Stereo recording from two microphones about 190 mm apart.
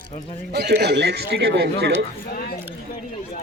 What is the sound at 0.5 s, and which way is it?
Speech, 60° right (ahead or behind).